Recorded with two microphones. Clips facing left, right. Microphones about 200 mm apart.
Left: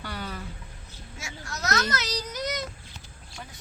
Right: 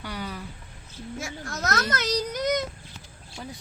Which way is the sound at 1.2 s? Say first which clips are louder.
Right 2 dB; 55° right (ahead or behind).